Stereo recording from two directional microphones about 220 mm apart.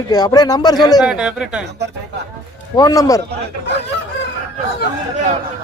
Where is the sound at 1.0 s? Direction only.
5° right (ahead or behind).